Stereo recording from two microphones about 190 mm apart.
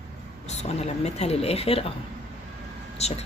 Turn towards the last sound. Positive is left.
turn(degrees=35)  # may be behind; listen again after turning